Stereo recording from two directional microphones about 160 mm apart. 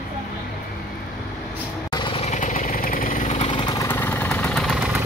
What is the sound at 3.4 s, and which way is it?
Vehicle, 30° left (ahead or behind).